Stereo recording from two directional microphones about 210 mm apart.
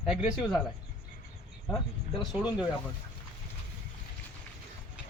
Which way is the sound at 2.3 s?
5° right (ahead or behind).